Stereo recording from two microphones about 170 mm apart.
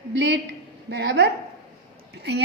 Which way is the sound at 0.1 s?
90° right.